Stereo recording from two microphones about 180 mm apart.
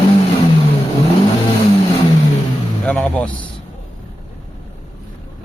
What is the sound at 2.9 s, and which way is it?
Speech, 5° left (ahead or behind).